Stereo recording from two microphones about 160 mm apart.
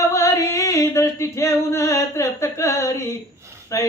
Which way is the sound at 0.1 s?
20° left (ahead or behind).